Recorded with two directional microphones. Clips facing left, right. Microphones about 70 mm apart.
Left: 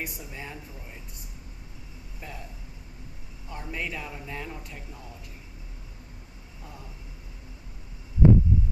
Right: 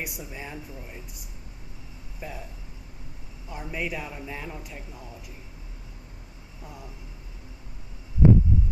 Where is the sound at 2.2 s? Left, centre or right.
Centre.